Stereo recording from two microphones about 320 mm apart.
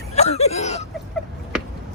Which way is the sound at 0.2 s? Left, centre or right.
Centre.